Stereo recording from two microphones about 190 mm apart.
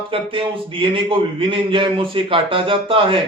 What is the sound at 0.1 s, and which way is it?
A man's voice, 30° right (ahead or behind).